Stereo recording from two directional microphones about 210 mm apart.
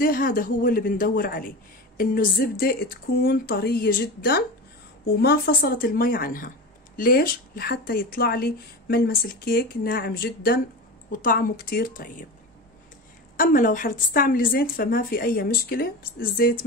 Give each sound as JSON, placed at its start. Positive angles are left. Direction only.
{"t": 0.0, "sound": "speech", "side_deg": 40}
{"t": 13.4, "sound": "speech", "side_deg": 40}